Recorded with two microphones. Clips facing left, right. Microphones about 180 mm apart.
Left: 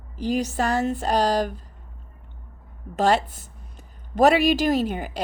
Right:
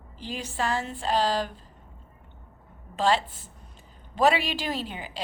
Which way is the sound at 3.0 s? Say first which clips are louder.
Left 4 dB; 45° left (ahead or behind).